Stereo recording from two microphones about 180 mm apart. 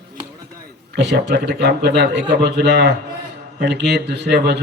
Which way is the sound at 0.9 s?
70° right (ahead or behind).